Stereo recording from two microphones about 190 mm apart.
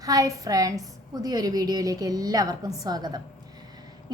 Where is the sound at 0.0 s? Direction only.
20° right (ahead or behind).